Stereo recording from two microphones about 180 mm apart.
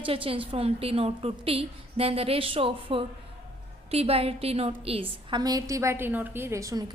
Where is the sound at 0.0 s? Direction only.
30° right (ahead or behind).